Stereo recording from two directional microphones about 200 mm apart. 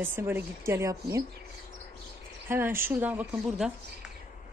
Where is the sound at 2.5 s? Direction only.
10° right (ahead or behind).